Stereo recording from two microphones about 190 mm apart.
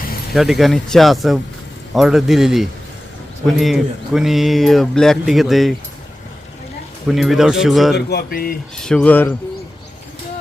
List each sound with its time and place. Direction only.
0.3 s speech: centre (ahead or behind)
7.1 s speech: centre (ahead or behind)
7.9 s speech: 55° left (ahead or behind)
8.8 s speech: 5° left (ahead or behind)